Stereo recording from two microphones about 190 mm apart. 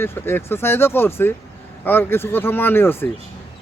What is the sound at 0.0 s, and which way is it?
Speech, 10° left (ahead or behind).